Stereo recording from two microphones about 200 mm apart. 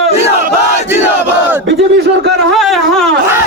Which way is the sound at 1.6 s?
65° right (ahead or behind).